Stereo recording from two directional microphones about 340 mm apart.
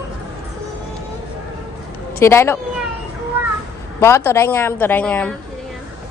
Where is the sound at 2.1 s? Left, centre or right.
Centre.